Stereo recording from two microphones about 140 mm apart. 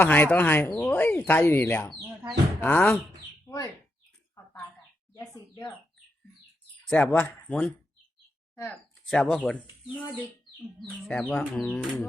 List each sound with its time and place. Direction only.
0.0 s speech: 15° left (ahead or behind)
3.4 s bird: 25° left (ahead or behind)
5.1 s speech: 20° left (ahead or behind)
6.8 s speech: 10° left (ahead or behind)
9.0 s speech: 5° left (ahead or behind)